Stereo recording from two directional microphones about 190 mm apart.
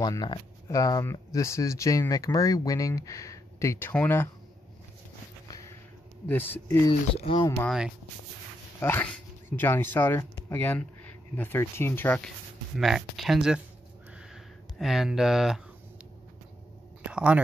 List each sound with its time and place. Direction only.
0.0 s speech: 20° left (ahead or behind)
6.2 s speech: 10° left (ahead or behind)
7.2 s speech: 25° left (ahead or behind)
7.6 s speech: centre (ahead or behind)
8.7 s speech: 10° left (ahead or behind)
12.7 s speech: centre (ahead or behind)
14.3 s a sound: centre (ahead or behind)
17.0 s a sound: 5° right (ahead or behind)